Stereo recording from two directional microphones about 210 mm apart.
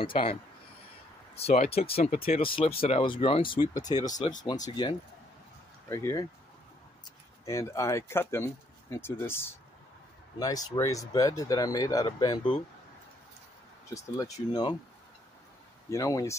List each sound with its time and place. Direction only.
0.0 s speech: 25° left (ahead or behind)
7.4 s speech: 15° left (ahead or behind)
10.4 s speech: 15° left (ahead or behind)
13.9 s speech: 15° left (ahead or behind)
15.9 s speech: 15° left (ahead or behind)